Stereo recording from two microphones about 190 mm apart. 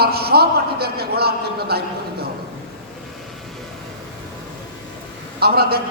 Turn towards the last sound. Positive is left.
turn(degrees=-55)  # may be behind; listen again after turning